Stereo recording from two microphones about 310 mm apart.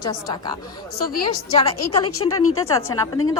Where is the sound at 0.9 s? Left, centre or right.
Left.